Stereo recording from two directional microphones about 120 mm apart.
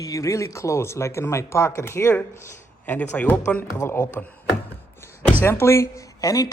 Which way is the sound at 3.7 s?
25° left (ahead or behind).